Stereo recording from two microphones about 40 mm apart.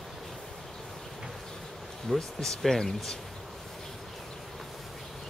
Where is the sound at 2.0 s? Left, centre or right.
Centre.